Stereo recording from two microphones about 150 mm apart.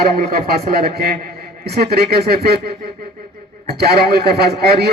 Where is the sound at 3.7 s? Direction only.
90° right.